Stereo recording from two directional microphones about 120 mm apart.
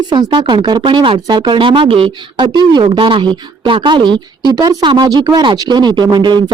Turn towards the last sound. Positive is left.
turn(degrees=-35)  # may be behind; listen again after turning